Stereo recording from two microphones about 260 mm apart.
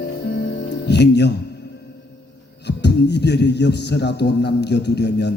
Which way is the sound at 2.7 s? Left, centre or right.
Left.